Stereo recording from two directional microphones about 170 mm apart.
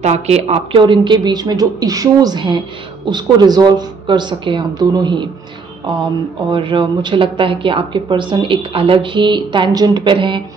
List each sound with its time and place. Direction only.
0.0 s a woman's voice: 40° right (ahead or behind)
6.5 s a woman's voice: 30° right (ahead or behind)